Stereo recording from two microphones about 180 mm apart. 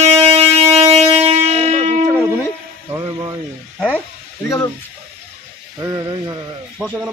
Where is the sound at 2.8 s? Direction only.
20° right (ahead or behind).